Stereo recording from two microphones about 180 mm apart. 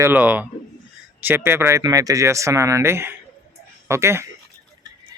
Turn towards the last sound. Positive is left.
turn(degrees=-15)  # may be behind; listen again after turning